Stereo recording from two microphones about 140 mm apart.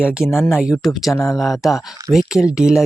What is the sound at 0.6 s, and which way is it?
Speech, 5° right (ahead or behind).